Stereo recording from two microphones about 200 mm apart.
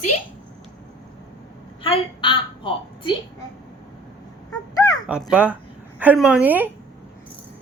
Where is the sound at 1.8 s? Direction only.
25° left (ahead or behind).